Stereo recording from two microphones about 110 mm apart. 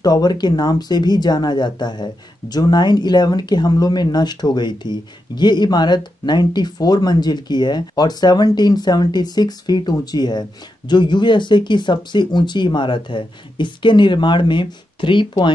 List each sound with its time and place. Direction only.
0.0 s speech: 40° left (ahead or behind)